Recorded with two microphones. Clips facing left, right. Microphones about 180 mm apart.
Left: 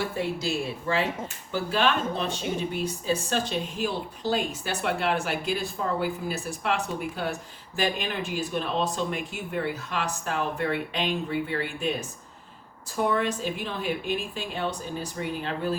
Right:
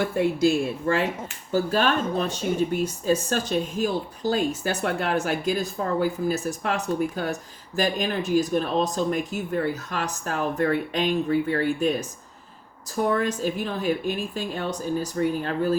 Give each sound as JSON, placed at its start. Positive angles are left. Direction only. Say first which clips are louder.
{"t": 0.0, "sound": "speech", "louder": "right 8 dB", "side_deg": -50}